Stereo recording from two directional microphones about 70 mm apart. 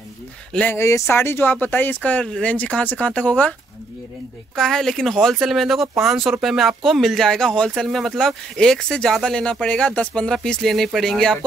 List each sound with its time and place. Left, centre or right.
0.7 s speech: left; by 3.5 s centre
4.6 s speech: centre